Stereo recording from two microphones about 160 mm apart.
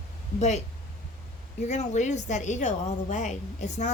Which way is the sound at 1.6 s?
45° left (ahead or behind).